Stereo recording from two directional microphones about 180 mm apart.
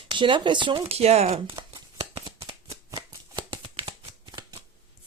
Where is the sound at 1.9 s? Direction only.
30° right (ahead or behind).